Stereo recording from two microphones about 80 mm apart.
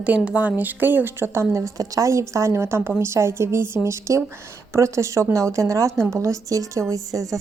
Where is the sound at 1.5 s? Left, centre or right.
Right.